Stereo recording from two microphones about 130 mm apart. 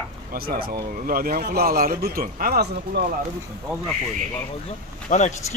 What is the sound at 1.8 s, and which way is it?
Speech, 90° right.